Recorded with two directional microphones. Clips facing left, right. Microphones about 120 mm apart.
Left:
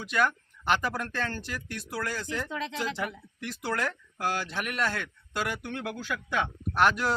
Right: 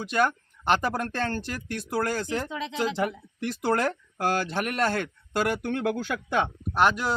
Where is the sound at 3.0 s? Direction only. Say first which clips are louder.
Right 6 dB; 35° right (ahead or behind); by 7.2 s 20° right (ahead or behind).